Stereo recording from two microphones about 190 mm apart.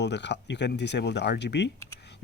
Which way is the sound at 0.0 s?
65° left (ahead or behind).